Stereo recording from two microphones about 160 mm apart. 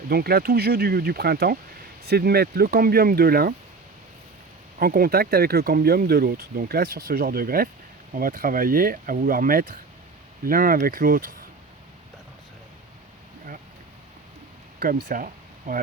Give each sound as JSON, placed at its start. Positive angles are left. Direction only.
{"t": 0.1, "sound": "speech", "side_deg": -75}
{"t": 4.8, "sound": "speech", "side_deg": -70}
{"t": 14.8, "sound": "speech", "side_deg": -60}